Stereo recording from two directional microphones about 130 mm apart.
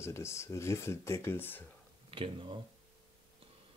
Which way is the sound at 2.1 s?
40° right (ahead or behind).